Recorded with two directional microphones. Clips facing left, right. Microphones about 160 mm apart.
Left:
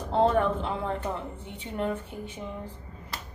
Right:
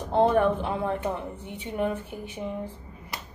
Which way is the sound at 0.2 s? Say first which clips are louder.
Right 2 dB; 10° right (ahead or behind).